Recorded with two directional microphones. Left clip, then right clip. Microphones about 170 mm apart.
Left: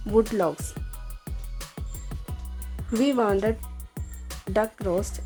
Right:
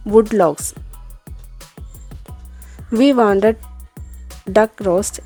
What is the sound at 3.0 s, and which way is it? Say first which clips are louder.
Speech: right 10 dB; 50° right (ahead or behind).